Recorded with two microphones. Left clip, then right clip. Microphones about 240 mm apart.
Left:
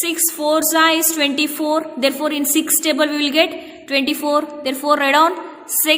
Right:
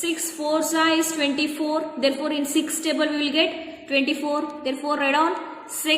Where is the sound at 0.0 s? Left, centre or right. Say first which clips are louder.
Left 6 dB; left.